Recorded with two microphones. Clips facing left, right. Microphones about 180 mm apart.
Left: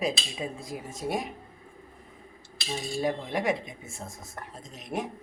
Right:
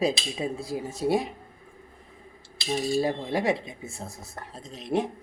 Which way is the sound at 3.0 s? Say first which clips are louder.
Right 2 dB; 30° right (ahead or behind).